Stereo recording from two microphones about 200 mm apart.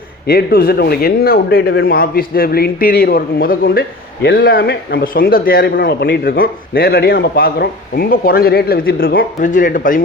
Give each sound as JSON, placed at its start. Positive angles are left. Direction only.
{"t": 0.3, "sound": "speech", "side_deg": 50}